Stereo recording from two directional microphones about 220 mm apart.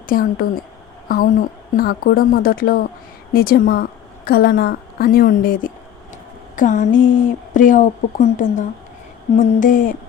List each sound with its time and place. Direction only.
0.1 s a woman's voice: 40° left (ahead or behind)